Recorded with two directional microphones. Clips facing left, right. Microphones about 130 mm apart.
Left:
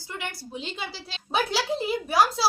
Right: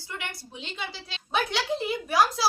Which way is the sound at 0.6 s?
Centre (ahead or behind).